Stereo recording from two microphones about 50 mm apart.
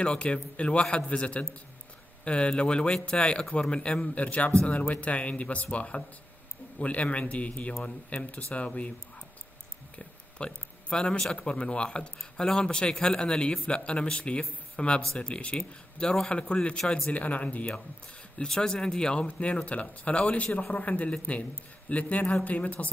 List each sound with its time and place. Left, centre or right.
0.0 s speech: left
9.9 s a sound: left
11.3 s speech: left
17.1 s speech: left
18.4 s speech: centre; by 22.8 s left